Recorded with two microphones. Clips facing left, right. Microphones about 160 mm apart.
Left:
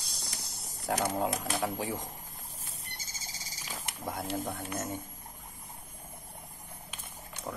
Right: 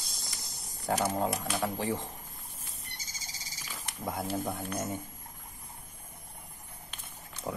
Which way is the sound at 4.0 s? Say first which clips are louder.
Right 2 dB; centre (ahead or behind).